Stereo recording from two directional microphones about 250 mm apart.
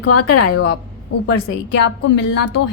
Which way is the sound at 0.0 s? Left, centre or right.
Left.